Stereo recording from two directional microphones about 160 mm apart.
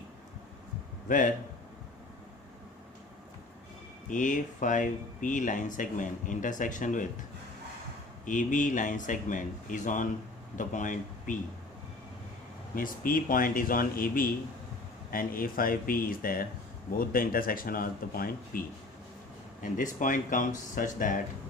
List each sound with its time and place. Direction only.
1.0 s speech: 55° left (ahead or behind)
4.1 s speech: 55° left (ahead or behind)
8.2 s speech: 55° left (ahead or behind)
12.7 s speech: 60° left (ahead or behind)
19.6 s speech: 55° left (ahead or behind)